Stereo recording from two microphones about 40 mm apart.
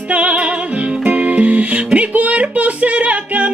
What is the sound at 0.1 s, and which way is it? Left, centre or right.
Music, right.